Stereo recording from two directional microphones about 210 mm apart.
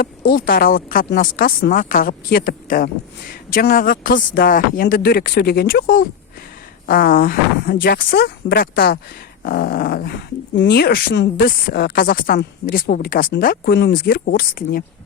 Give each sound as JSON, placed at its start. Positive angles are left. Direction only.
{"t": 0.0, "sound": "speech", "side_deg": 45}